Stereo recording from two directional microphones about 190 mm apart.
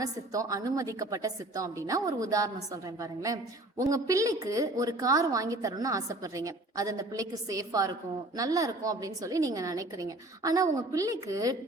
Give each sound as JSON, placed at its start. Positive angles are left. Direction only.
{"t": 0.0, "sound": "a woman's voice", "side_deg": -20}